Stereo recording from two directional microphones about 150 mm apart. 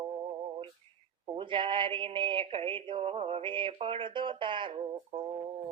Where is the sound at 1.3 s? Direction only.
35° right (ahead or behind).